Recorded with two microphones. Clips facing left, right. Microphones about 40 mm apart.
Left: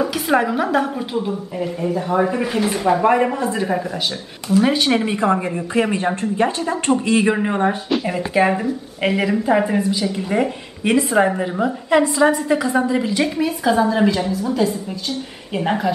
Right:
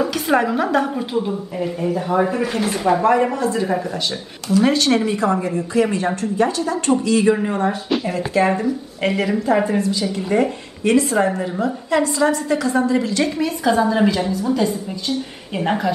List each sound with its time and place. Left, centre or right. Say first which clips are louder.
0.0 s a woman's voice: even; centre
3.3 s a woman's voice: right 1 dB; left
3.6 s a woman's voice: even; centre